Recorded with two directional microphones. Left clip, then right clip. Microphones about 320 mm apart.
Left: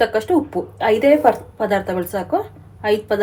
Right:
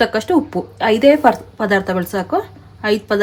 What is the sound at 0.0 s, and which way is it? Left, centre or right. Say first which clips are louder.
A woman's voice: right 1 dB; right.